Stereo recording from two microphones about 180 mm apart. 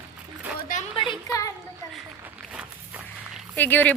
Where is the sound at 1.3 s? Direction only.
20° left (ahead or behind).